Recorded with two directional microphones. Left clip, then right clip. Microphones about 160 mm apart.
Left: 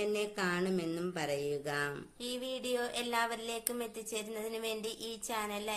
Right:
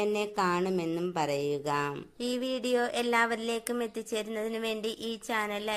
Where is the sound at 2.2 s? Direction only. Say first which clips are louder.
Right 7 dB; 40° right (ahead or behind).